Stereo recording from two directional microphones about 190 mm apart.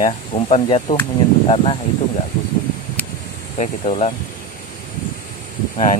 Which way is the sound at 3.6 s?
35° left (ahead or behind).